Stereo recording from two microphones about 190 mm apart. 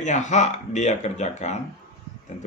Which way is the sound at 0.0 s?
40° left (ahead or behind).